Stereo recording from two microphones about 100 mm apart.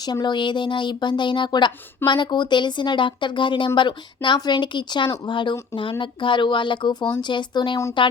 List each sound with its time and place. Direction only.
0.0 s speech: 45° left (ahead or behind)